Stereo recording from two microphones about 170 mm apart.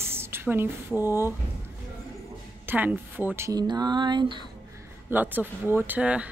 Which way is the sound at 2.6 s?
10° right (ahead or behind).